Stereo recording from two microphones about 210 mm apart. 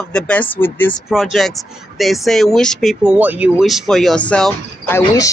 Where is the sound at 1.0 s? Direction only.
Centre (ahead or behind).